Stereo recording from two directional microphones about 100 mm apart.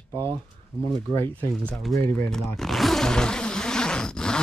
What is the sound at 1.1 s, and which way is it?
Speech, 20° left (ahead or behind).